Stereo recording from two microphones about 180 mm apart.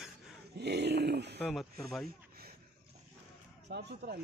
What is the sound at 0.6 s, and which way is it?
Speech, 70° right (ahead or behind).